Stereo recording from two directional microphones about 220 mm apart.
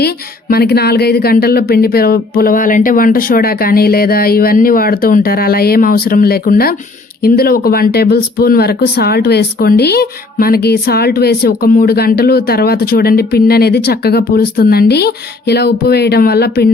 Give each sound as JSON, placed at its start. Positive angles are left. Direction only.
{"t": 0.0, "sound": "speech", "side_deg": 45}